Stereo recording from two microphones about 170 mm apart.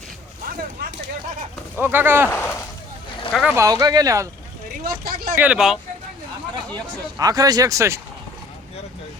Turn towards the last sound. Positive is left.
turn(degrees=-15)  # may be behind; listen again after turning